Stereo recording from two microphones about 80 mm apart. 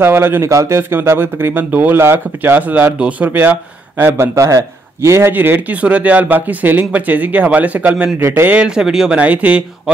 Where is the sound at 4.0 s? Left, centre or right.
Right; by 9.2 s centre.